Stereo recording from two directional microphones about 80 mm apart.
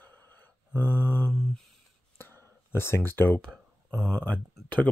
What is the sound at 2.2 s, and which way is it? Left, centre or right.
Clicking, left.